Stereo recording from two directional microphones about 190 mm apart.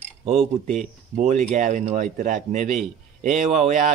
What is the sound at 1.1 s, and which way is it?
Speech, 40° right (ahead or behind).